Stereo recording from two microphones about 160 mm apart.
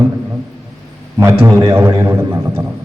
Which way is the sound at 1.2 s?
15° right (ahead or behind).